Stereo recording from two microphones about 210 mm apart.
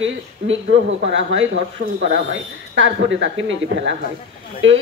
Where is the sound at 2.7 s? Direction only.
60° right (ahead or behind).